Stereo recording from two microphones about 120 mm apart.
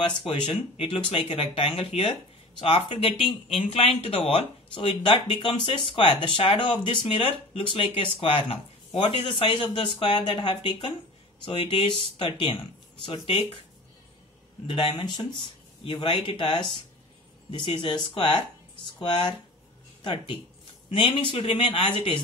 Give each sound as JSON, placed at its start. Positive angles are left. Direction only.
{"t": 0.3, "sound": "speech", "side_deg": 45}
{"t": 4.7, "sound": "speech", "side_deg": 45}
{"t": 14.7, "sound": "speech", "side_deg": 45}